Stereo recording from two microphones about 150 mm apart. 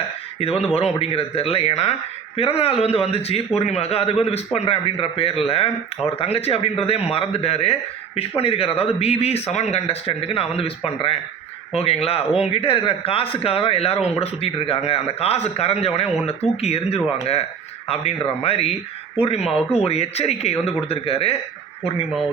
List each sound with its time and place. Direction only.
0.3 s a man's voice: 45° left (ahead or behind)